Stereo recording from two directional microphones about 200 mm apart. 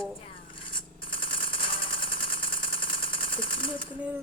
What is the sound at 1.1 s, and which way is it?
Machine gun, 25° left (ahead or behind).